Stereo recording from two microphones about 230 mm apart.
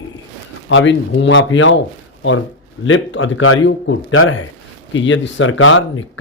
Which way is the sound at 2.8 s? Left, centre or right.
Left.